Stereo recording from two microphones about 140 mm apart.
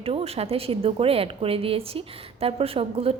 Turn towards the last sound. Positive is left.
turn(degrees=-45)  # may be behind; listen again after turning